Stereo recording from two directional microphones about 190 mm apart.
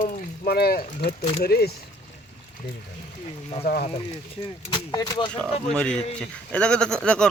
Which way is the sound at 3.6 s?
55° left (ahead or behind).